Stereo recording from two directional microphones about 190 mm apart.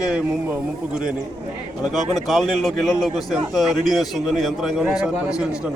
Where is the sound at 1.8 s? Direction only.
Centre (ahead or behind).